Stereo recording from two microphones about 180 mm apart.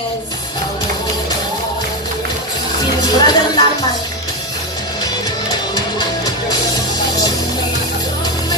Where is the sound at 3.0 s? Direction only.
20° left (ahead or behind).